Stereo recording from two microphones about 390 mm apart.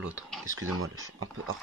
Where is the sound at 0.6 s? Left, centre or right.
Right.